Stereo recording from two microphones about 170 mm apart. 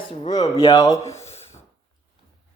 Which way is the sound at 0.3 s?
20° left (ahead or behind).